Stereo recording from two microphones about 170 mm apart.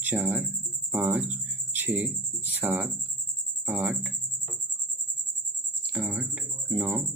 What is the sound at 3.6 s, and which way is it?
Speech, 10° right (ahead or behind).